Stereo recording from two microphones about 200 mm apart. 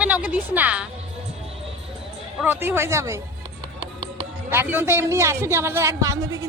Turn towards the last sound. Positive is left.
turn(degrees=-15)  # may be behind; listen again after turning